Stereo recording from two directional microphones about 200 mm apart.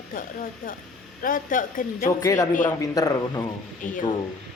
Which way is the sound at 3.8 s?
40° left (ahead or behind).